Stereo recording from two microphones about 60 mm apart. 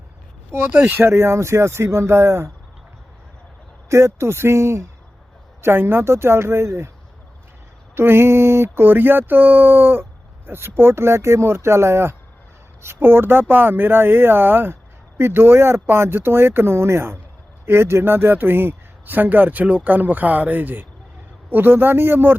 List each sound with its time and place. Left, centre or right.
0.7 s speech: right
3.8 s speech: right
5.6 s speech: right
7.9 s a sound: right